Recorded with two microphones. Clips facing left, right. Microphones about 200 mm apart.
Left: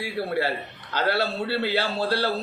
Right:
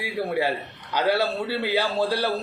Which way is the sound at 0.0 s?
15° right (ahead or behind).